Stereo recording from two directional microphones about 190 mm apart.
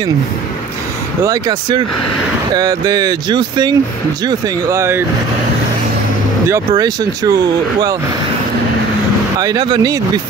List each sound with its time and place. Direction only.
1.2 s speech: 20° right (ahead or behind)
6.5 s speech: 20° right (ahead or behind)
9.4 s speech: 20° right (ahead or behind)